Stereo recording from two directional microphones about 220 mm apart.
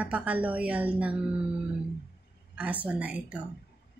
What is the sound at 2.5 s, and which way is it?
Speech, 5° right (ahead or behind).